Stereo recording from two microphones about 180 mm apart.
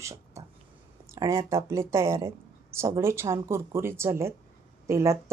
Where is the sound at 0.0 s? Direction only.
15° right (ahead or behind).